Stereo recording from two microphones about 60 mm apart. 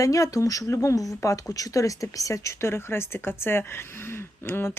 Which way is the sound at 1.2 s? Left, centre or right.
Left.